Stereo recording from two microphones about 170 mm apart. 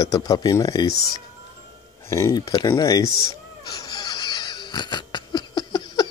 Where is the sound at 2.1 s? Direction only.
20° left (ahead or behind).